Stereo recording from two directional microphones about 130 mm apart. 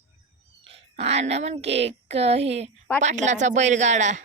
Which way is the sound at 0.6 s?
50° right (ahead or behind).